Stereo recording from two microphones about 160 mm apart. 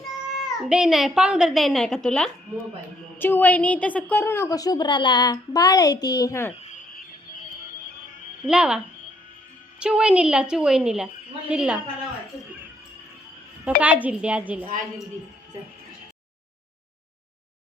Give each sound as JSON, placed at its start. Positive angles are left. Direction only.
{"t": 0.3, "sound": "a woman's voice", "side_deg": -5}
{"t": 8.4, "sound": "speech", "side_deg": -5}
{"t": 9.8, "sound": "a woman's voice", "side_deg": -5}
{"t": 13.8, "sound": "a woman's voice", "side_deg": -10}